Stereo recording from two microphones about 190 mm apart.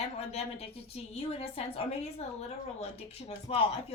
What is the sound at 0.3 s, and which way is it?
Speech, 30° left (ahead or behind).